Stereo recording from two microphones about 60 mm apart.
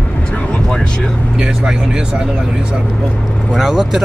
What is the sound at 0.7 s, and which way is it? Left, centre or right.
Speech, centre.